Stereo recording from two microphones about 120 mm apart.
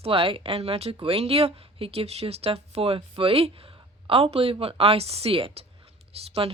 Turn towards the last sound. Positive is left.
turn(degrees=-55)  # may be behind; listen again after turning